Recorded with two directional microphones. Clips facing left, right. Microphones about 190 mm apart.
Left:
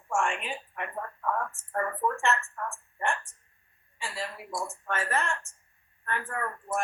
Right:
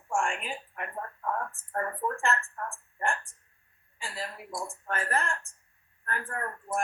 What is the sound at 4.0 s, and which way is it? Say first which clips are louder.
Speech: left 2 dB; 35° right (ahead or behind).